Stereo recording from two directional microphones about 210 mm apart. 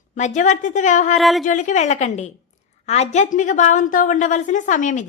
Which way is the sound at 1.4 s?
35° left (ahead or behind).